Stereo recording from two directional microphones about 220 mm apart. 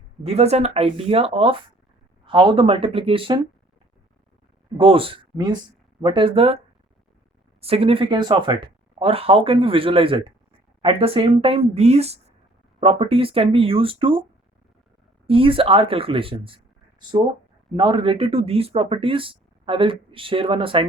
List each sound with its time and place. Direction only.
0.2 s speech: 30° right (ahead or behind)
4.8 s speech: 25° right (ahead or behind)
7.6 s speech: 25° right (ahead or behind)
15.3 s speech: 25° right (ahead or behind)